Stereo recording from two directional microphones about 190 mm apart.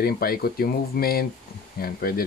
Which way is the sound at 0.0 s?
50° left (ahead or behind).